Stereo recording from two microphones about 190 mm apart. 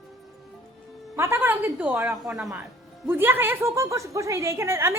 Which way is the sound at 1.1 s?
10° right (ahead or behind).